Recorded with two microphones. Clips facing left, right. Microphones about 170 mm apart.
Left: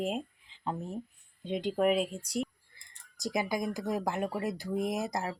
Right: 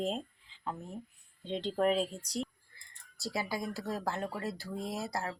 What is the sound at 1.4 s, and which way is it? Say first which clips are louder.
Speech: left 2 dB; 10° left (ahead or behind).